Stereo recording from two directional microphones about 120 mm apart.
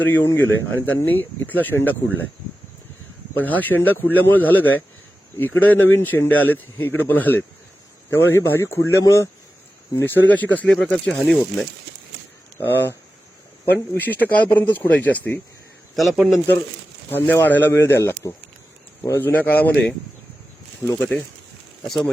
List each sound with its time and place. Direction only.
0.0 s speech: 20° left (ahead or behind)
3.3 s speech: 15° left (ahead or behind)
12.5 s speech: 15° left (ahead or behind)
16.0 s speech: centre (ahead or behind)
17.1 s speech: 15° left (ahead or behind); by 22.1 s centre (ahead or behind)